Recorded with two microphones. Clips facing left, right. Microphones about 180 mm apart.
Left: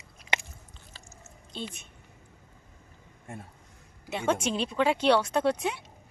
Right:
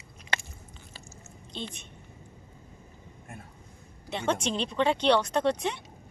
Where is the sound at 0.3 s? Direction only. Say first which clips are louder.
Left 1 dB; 20° left (ahead or behind).